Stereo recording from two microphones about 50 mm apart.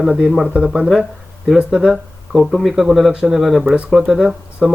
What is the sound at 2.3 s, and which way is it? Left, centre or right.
Speech, centre.